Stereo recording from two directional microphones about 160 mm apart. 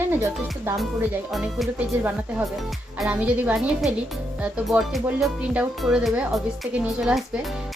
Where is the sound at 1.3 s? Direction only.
Centre (ahead or behind).